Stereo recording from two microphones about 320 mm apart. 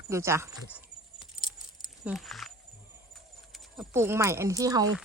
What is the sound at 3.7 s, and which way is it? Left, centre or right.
Speech, centre.